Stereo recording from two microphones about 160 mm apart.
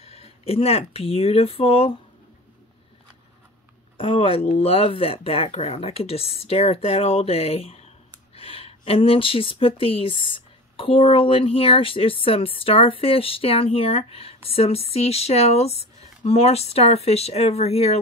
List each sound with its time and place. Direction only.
0.0 s speech: 40° left (ahead or behind)
4.0 s speech: 35° left (ahead or behind)